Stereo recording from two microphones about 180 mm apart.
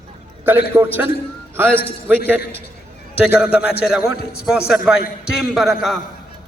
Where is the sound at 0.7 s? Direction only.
15° right (ahead or behind).